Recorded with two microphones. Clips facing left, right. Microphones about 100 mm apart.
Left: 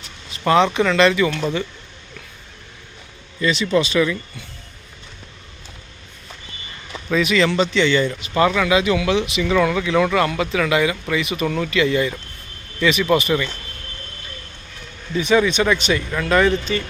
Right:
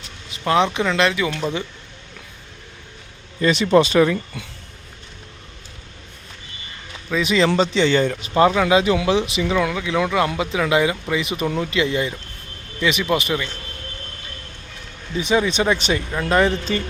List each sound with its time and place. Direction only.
0.6 s speech: 15° right (ahead or behind)
3.4 s speech: 50° right (ahead or behind)
7.2 s speech: 30° right (ahead or behind); by 8.3 s 50° right (ahead or behind)
8.3 s speech: 30° right (ahead or behind)
9.6 s speech: 5° right (ahead or behind); by 12.1 s 25° right (ahead or behind)
12.8 s speech: 15° right (ahead or behind)
15.2 s speech: 25° right (ahead or behind)